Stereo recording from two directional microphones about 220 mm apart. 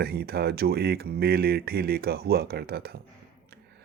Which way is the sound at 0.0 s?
45° right (ahead or behind).